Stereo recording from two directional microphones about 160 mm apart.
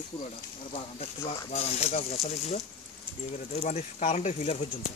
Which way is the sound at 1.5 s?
40° left (ahead or behind).